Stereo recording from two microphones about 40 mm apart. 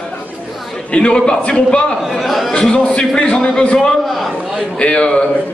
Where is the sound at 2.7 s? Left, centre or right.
Left.